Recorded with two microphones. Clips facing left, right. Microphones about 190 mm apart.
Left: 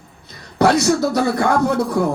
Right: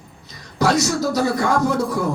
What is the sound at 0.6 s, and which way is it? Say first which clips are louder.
Music: left 4 dB; 60° left (ahead or behind).